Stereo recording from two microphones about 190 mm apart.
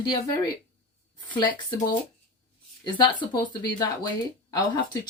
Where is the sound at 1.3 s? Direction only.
25° left (ahead or behind).